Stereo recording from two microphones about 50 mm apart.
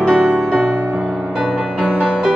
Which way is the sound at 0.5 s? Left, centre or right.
Right.